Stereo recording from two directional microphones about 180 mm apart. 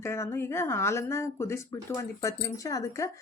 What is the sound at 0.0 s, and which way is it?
Speech, 15° left (ahead or behind).